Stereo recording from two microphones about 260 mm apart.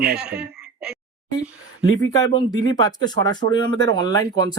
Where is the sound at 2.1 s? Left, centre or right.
Centre.